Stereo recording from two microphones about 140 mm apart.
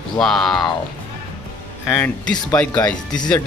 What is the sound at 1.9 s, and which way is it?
Speech, 10° left (ahead or behind).